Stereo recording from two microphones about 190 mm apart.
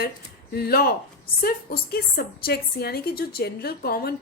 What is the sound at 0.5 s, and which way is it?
A woman's voice, 55° left (ahead or behind).